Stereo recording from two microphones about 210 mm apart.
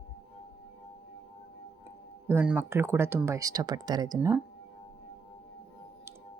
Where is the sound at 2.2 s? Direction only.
10° right (ahead or behind).